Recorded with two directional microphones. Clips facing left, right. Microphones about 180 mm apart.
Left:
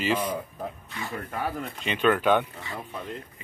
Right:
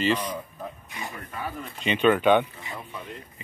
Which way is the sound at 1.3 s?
65° left (ahead or behind).